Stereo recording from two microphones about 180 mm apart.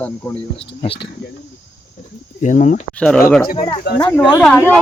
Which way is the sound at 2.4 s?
45° left (ahead or behind).